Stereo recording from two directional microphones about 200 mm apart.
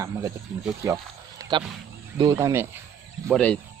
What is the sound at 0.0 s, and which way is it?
Speech, 15° right (ahead or behind).